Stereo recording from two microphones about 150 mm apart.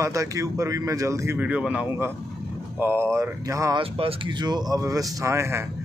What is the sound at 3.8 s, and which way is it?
A man's voice, 40° right (ahead or behind).